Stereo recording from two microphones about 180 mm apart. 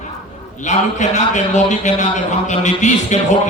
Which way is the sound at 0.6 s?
40° left (ahead or behind).